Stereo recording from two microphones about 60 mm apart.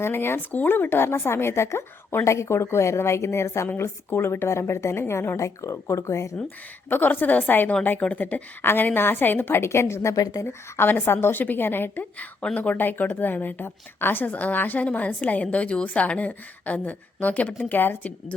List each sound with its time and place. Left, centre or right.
0.0 s a woman's voice: left
2.2 s speech: left
5.4 s speech: left
6.9 s a woman's voice: left